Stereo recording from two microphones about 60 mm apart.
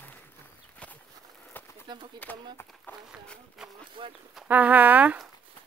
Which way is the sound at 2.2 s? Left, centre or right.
Left.